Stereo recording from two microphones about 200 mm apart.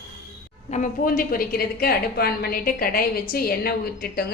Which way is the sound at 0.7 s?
40° left (ahead or behind).